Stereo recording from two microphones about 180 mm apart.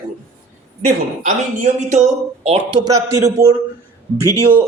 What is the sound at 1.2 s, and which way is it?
Speech, 45° right (ahead or behind).